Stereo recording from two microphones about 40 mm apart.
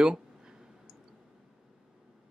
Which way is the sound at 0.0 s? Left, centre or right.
Centre.